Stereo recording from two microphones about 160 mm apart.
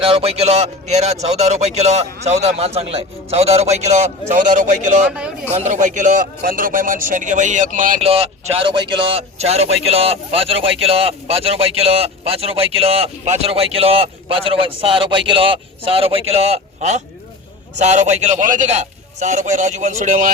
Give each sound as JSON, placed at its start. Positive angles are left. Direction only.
{"t": 0.0, "sound": "a man's voice", "side_deg": -40}
{"t": 8.0, "sound": "a man's voice", "side_deg": -40}